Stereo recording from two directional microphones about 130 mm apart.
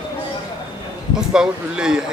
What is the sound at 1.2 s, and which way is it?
Speech, 5° right (ahead or behind).